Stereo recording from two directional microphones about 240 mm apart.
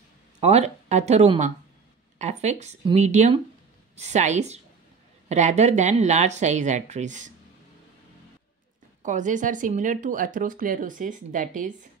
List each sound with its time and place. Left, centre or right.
0.4 s speech: right
9.0 s speech: right